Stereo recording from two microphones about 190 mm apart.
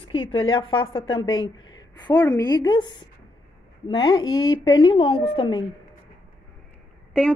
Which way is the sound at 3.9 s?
25° left (ahead or behind).